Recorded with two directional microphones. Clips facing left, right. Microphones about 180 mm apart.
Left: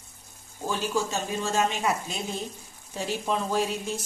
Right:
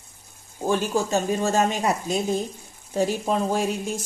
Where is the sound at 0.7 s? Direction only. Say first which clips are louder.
Right 6 dB; 50° right (ahead or behind).